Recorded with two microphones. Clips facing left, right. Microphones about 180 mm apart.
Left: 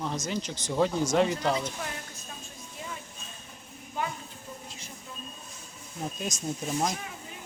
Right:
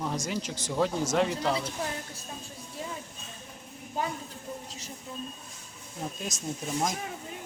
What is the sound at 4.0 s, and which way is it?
Speech, 40° right (ahead or behind).